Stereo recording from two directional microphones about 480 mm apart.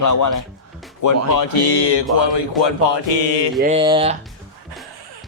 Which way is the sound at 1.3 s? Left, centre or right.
Left.